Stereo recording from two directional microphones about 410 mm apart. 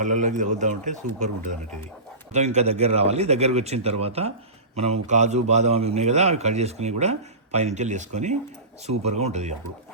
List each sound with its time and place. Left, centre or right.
0.0 s a man's voice: centre
2.3 s a man's voice: centre